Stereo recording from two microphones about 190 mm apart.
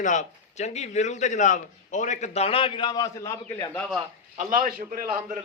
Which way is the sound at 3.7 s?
Centre (ahead or behind).